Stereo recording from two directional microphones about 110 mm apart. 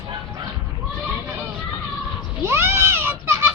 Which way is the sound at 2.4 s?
25° right (ahead or behind).